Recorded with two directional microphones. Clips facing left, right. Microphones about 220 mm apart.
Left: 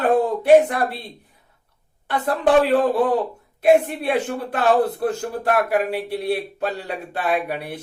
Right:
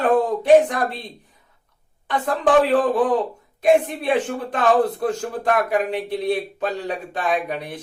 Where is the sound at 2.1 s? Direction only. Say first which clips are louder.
Even; 10° left (ahead or behind).